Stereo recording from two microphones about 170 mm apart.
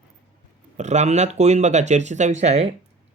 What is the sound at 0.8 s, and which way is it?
Speech, 45° right (ahead or behind).